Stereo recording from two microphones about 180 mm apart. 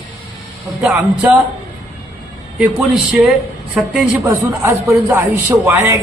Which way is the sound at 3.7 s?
10° right (ahead or behind).